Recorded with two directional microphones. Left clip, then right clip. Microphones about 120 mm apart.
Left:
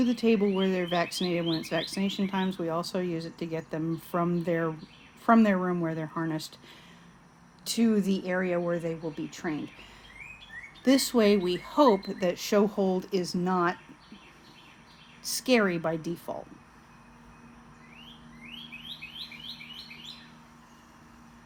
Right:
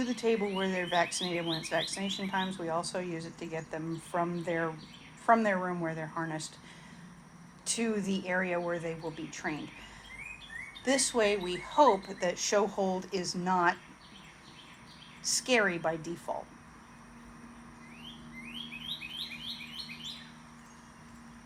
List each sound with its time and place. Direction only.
0.0 s speech: 50° left (ahead or behind)
7.6 s speech: 45° left (ahead or behind)
10.8 s speech: 60° left (ahead or behind); by 13.7 s 45° left (ahead or behind)
15.2 s speech: 50° left (ahead or behind)